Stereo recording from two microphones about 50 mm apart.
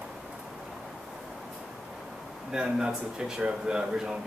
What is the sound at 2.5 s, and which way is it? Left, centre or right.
Speech, centre.